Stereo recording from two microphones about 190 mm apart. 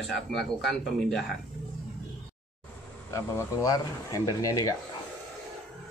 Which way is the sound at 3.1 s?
15° left (ahead or behind).